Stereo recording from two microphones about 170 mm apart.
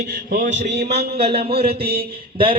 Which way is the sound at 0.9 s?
35° right (ahead or behind).